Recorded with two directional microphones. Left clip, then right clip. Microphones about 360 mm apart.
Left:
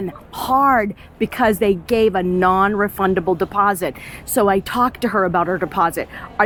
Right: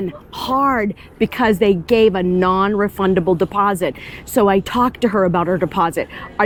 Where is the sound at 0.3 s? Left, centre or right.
Centre.